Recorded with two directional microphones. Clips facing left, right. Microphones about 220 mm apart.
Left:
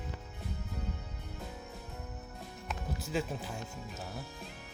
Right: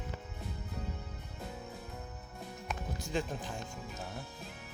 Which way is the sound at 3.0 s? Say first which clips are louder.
Left 1 dB; 5° left (ahead or behind).